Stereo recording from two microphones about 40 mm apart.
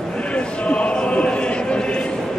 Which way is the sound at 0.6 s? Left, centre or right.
Left.